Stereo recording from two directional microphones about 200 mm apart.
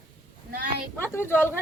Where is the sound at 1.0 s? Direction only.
10° left (ahead or behind).